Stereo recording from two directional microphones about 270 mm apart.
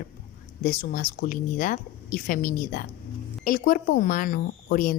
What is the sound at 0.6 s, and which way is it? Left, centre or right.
Speech, left.